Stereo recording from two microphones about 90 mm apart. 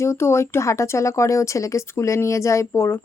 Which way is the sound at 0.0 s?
30° left (ahead or behind).